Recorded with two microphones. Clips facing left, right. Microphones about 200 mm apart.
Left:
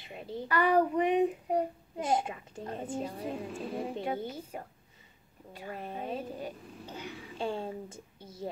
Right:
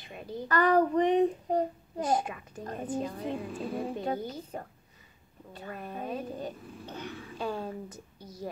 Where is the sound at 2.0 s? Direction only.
25° left (ahead or behind).